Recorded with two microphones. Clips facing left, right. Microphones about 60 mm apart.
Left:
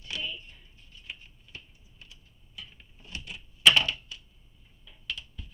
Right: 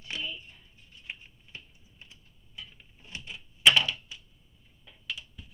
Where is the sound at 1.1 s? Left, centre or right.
Right.